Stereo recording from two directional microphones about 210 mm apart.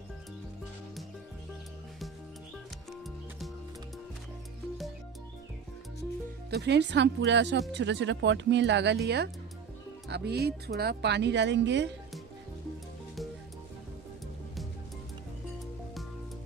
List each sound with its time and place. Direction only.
2.9 s music: centre (ahead or behind)
6.5 s speech: 55° right (ahead or behind)